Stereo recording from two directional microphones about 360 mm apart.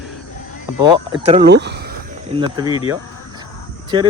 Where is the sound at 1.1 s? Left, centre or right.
Centre.